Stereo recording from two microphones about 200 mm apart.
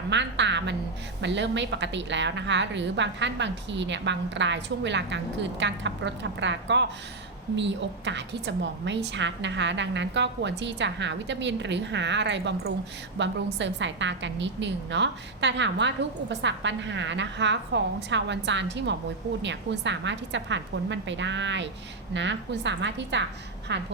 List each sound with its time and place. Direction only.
0.1 s a woman's voice: 60° right (ahead or behind)